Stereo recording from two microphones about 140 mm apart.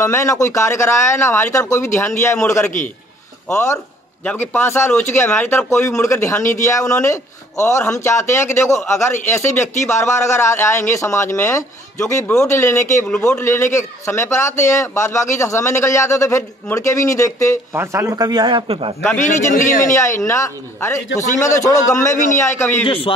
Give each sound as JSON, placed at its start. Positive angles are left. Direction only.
{"t": 0.0, "sound": "a man's voice", "side_deg": 20}
{"t": 4.2, "sound": "a man's voice", "side_deg": 10}
{"t": 17.7, "sound": "a man's voice", "side_deg": -20}
{"t": 19.1, "sound": "a man's voice", "side_deg": 60}
{"t": 20.2, "sound": "a man's voice", "side_deg": 20}
{"t": 22.1, "sound": "a man's voice", "side_deg": 65}
{"t": 22.4, "sound": "speech", "side_deg": 20}
{"t": 22.8, "sound": "a man's voice", "side_deg": 40}